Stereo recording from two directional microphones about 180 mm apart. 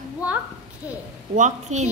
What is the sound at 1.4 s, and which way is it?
Speech, 40° right (ahead or behind).